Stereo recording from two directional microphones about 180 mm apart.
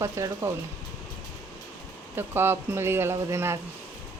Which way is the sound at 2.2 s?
15° right (ahead or behind).